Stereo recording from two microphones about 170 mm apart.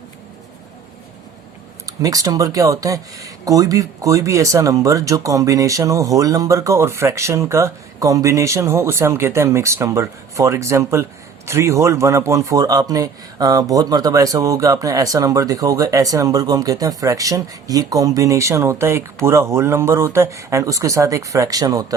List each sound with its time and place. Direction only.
1.9 s speech: 20° right (ahead or behind)